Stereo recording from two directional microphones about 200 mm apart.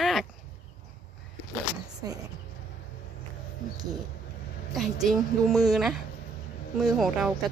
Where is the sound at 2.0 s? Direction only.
15° right (ahead or behind).